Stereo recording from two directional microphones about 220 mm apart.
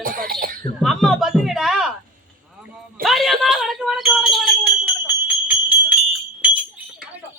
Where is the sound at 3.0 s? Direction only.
Centre (ahead or behind).